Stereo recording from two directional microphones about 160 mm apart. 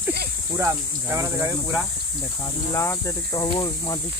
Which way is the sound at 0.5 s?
15° right (ahead or behind).